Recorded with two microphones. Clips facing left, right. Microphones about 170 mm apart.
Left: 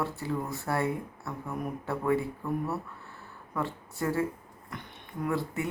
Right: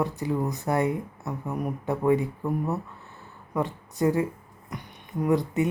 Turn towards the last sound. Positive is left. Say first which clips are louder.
# right 7 dB
turn(degrees=-20)  # may be behind; listen again after turning